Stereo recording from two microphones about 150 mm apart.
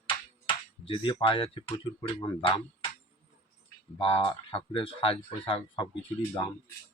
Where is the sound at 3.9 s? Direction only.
35° left (ahead or behind).